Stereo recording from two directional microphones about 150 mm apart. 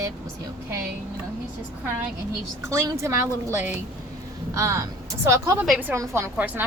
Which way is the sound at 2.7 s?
20° right (ahead or behind).